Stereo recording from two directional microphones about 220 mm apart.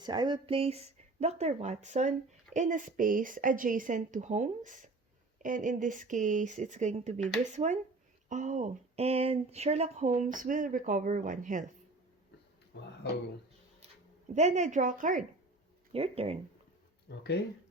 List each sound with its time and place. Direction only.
0.0 s speech: 20° right (ahead or behind); by 11.6 s 35° right (ahead or behind)
12.7 s a sound: 50° left (ahead or behind)
14.3 s speech: 30° right (ahead or behind)
15.9 s speech: 25° right (ahead or behind)
17.1 s speech: 50° left (ahead or behind)